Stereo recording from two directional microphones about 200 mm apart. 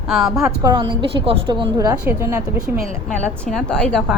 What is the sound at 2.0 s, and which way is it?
Speech, 10° right (ahead or behind).